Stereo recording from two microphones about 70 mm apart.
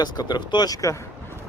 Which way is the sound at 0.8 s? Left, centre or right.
Left.